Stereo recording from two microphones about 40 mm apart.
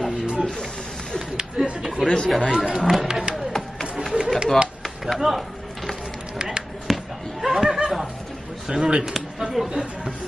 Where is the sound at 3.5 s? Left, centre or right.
Centre.